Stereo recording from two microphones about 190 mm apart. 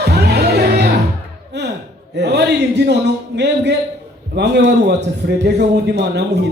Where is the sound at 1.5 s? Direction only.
60° right (ahead or behind).